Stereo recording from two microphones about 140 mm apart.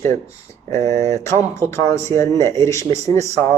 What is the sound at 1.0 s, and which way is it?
Speech, 20° left (ahead or behind).